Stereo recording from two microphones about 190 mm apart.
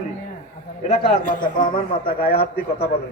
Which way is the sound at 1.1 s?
45° left (ahead or behind).